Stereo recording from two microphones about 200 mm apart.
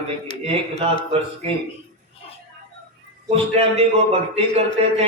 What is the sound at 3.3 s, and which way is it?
A man's voice, 30° right (ahead or behind).